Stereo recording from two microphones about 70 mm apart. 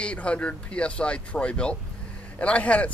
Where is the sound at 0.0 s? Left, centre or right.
Centre.